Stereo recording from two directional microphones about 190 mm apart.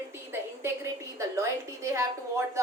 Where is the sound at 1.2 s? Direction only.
15° right (ahead or behind).